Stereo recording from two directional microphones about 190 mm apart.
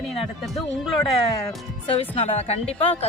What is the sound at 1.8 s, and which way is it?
Speech, 30° left (ahead or behind).